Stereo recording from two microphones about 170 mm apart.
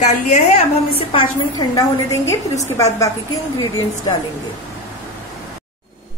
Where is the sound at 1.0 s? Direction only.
30° left (ahead or behind).